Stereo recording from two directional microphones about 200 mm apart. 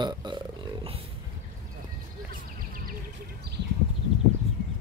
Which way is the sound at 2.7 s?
45° right (ahead or behind).